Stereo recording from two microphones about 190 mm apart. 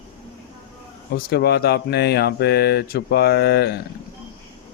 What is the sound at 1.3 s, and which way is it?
Speech, 60° left (ahead or behind).